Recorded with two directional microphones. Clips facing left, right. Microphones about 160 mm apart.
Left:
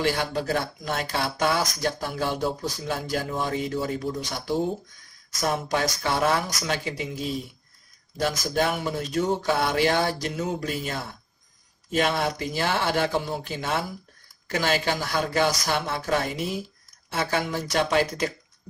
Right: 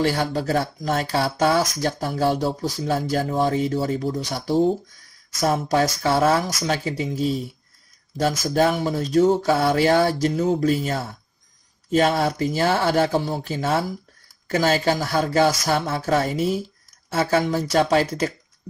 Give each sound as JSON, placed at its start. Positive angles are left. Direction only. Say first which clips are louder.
{"t": 0.0, "sound": "speech", "louder": "right 4 dB", "side_deg": -40}
{"t": 8.2, "sound": "speech", "louder": "right 5 dB", "side_deg": -40}